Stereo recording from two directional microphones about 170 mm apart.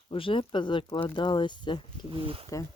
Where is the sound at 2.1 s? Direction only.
30° right (ahead or behind).